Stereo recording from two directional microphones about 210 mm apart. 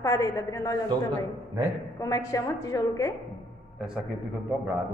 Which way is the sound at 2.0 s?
15° left (ahead or behind).